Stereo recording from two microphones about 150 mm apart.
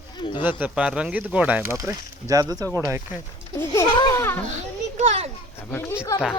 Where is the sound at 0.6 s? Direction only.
5° right (ahead or behind).